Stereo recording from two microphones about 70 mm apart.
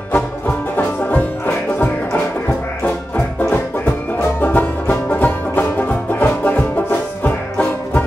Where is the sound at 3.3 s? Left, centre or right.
Left.